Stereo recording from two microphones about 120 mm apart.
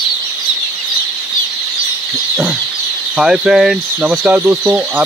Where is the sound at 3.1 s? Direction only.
5° right (ahead or behind).